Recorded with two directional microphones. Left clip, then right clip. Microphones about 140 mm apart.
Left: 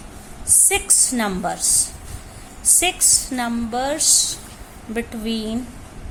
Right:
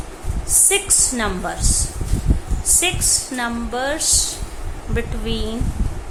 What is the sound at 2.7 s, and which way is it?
A woman's voice, 45° left (ahead or behind).